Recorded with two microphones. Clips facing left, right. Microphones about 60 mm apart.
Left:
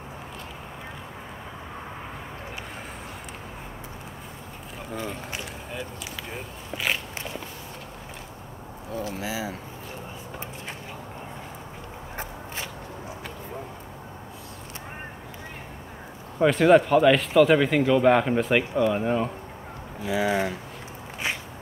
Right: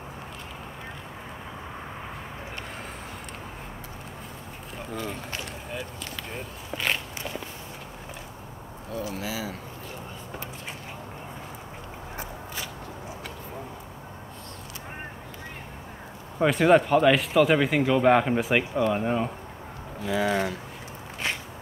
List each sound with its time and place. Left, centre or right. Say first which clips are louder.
4.9 s run: left 1 dB; centre
6.3 s a sound: even; centre
9.2 s speech: left 2 dB; left
16.3 s speech: left 2 dB; centre
20.0 s speech: left 1 dB; centre